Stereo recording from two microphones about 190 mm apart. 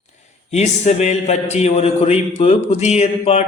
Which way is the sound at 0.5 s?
35° left (ahead or behind).